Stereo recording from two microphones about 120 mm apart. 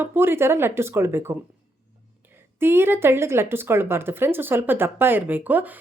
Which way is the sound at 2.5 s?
20° right (ahead or behind).